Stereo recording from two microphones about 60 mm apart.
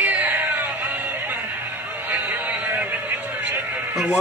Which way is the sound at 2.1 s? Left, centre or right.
Right.